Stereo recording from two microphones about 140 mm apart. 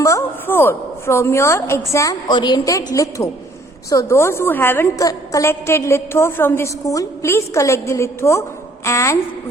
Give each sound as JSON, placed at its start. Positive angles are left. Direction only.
{"t": 0.0, "sound": "a woman's voice", "side_deg": 20}